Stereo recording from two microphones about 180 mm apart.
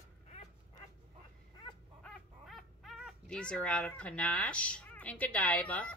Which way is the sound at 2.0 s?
Centre (ahead or behind).